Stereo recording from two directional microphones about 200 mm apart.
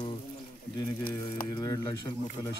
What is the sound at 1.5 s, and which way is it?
Speech, 20° left (ahead or behind).